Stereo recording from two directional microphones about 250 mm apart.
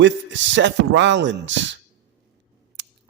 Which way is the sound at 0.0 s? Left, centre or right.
Right.